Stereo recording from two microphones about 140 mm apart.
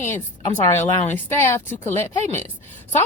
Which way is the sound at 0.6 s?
15° left (ahead or behind).